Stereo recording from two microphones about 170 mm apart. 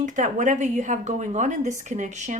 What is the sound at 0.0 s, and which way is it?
Speech, 45° right (ahead or behind).